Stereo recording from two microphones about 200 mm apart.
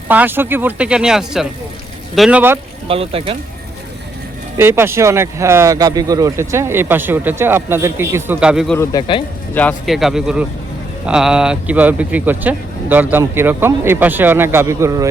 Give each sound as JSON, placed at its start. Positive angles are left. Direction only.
{"t": 0.1, "sound": "speech", "side_deg": -10}
{"t": 2.8, "sound": "speech", "side_deg": -30}
{"t": 4.5, "sound": "speech", "side_deg": -10}
{"t": 8.8, "sound": "speech", "side_deg": 20}
{"t": 9.6, "sound": "speech", "side_deg": 5}